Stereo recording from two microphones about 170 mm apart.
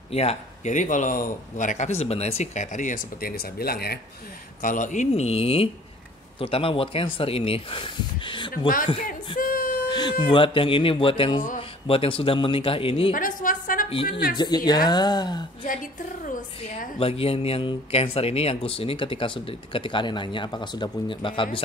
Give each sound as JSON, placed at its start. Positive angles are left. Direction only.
{"t": 0.1, "sound": "a man's voice", "side_deg": 35}
{"t": 4.6, "sound": "speech", "side_deg": 50}
{"t": 9.4, "sound": "a sound", "side_deg": 55}
{"t": 9.8, "sound": "speech", "side_deg": 25}
{"t": 13.1, "sound": "a sound", "side_deg": 50}
{"t": 14.3, "sound": "a woman's voice", "side_deg": 25}
{"t": 17.0, "sound": "speech", "side_deg": 35}